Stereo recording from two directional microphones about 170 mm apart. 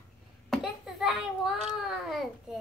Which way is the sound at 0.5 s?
Centre (ahead or behind).